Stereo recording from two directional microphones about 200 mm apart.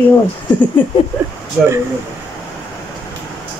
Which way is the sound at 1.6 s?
5° right (ahead or behind).